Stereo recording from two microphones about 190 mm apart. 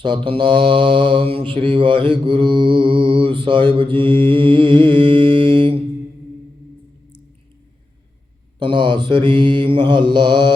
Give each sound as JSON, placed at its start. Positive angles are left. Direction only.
{"t": 0.0, "sound": "mantra", "side_deg": -25}
{"t": 8.5, "sound": "mantra", "side_deg": -25}